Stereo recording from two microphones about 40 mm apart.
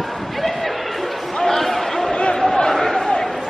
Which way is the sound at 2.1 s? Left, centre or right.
Left.